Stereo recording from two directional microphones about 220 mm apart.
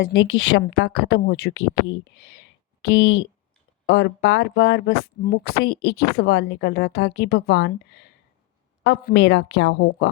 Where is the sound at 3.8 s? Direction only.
55° left (ahead or behind).